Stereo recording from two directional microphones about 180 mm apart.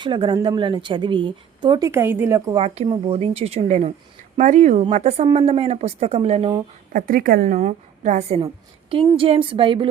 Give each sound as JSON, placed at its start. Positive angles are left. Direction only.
{"t": 0.0, "sound": "a woman's voice", "side_deg": -25}
{"t": 1.9, "sound": "a woman's voice", "side_deg": -15}
{"t": 2.5, "sound": "speech", "side_deg": -35}
{"t": 6.9, "sound": "a woman's voice", "side_deg": -50}
{"t": 8.4, "sound": "a woman's voice", "side_deg": -30}